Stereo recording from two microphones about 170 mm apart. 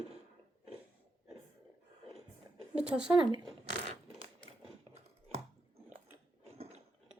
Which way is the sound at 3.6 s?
40° right (ahead or behind).